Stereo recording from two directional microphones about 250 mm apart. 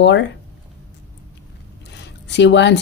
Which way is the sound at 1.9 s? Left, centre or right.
Left.